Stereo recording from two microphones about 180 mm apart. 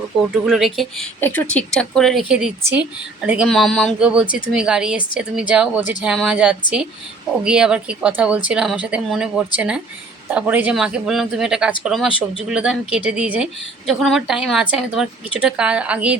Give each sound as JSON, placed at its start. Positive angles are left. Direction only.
{"t": 0.2, "sound": "a woman's voice", "side_deg": 0}
{"t": 1.2, "sound": "a woman's voice", "side_deg": 10}